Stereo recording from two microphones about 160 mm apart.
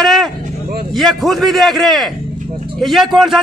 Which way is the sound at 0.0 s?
Centre (ahead or behind).